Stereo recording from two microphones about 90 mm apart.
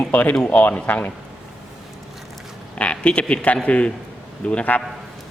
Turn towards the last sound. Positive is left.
turn(degrees=15)  # may be behind; listen again after turning